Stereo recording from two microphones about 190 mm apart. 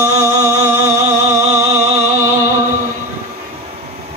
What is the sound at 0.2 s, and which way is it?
Music, 15° right (ahead or behind).